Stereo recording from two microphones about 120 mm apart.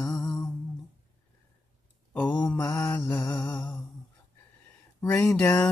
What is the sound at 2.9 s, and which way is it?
Music, 20° left (ahead or behind).